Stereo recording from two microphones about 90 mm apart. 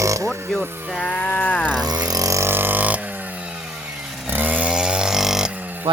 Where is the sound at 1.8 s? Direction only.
45° right (ahead or behind); by 3.0 s 20° right (ahead or behind).